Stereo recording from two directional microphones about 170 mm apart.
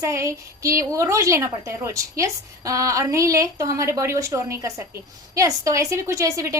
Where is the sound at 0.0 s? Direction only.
15° right (ahead or behind).